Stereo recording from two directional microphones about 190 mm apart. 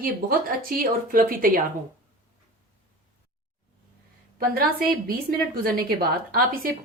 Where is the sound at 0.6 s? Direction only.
50° right (ahead or behind).